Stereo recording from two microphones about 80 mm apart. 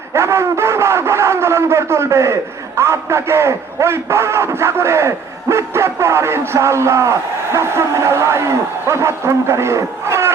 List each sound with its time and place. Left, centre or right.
0.1 s a man's voice: right